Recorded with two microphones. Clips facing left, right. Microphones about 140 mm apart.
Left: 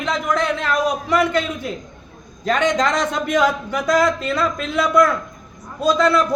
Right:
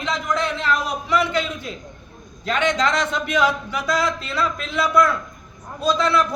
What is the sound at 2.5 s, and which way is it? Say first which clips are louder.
A man's voice: left 3 dB; 45° left (ahead or behind).